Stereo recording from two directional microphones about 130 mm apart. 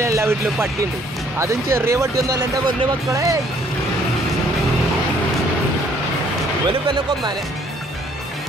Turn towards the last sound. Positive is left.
turn(degrees=-35)  # may be behind; listen again after turning